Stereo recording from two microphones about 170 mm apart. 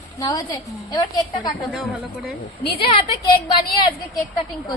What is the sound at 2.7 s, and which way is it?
A woman's voice, 30° left (ahead or behind).